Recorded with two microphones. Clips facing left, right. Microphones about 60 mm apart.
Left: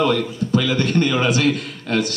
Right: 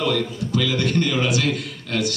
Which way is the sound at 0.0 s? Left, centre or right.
Left.